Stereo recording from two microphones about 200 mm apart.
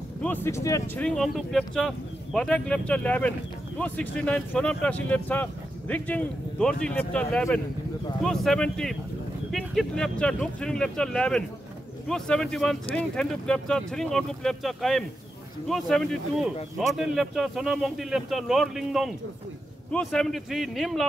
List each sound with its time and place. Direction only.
0.2 s speech: 10° left (ahead or behind)